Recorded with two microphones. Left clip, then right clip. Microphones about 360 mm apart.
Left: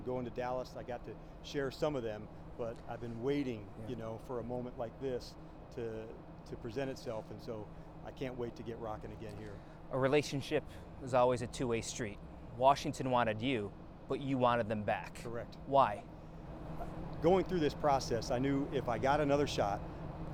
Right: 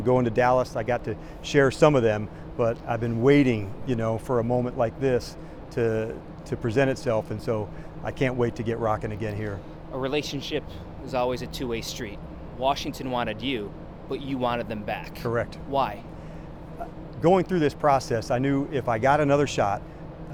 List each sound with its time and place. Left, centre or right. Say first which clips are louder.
0.0 s speech: right 18 dB; right
9.9 s speech: right 4 dB; left
17.2 s speech: right 10 dB; right